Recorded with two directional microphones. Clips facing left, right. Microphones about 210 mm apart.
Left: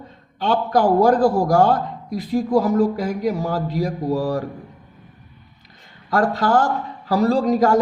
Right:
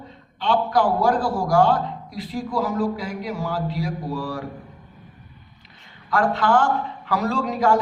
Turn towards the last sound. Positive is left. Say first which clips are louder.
# left 5 dB
turn(degrees=40)  # may be behind; listen again after turning